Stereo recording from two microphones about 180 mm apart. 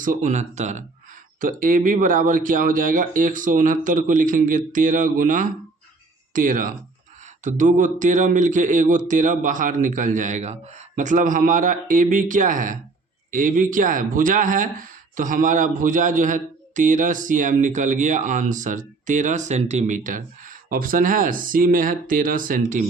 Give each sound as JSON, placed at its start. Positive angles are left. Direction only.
{"t": 0.0, "sound": "speech", "side_deg": -45}